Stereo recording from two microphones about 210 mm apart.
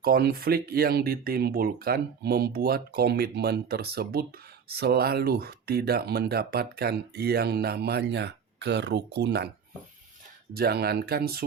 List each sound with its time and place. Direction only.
0.0 s speech: 45° right (ahead or behind)
10.5 s speech: 45° right (ahead or behind)